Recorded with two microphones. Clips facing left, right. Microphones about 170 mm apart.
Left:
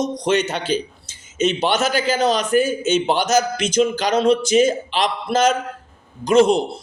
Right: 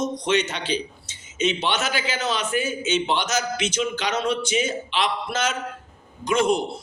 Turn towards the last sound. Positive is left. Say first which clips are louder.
# left 7 dB
turn(degrees=35)  # may be behind; listen again after turning